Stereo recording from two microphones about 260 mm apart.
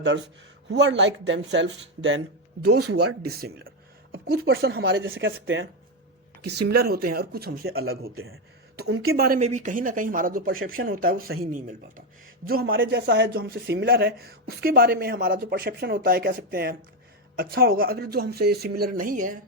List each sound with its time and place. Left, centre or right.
0.0 s speech: right
2.8 s speech: right
3.2 s speech: right
7.7 s speech: right
9.1 s speech: right
12.6 s speech: right